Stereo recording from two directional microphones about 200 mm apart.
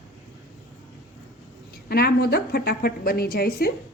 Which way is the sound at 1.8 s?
50° left (ahead or behind).